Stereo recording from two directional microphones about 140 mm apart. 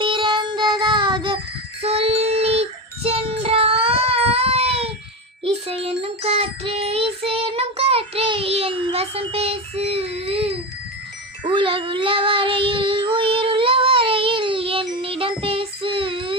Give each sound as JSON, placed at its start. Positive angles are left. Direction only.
{"t": 0.0, "sound": "child singing", "side_deg": -35}